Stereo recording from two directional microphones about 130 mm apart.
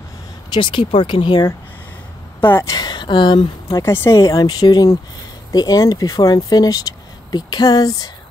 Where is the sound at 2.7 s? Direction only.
35° left (ahead or behind).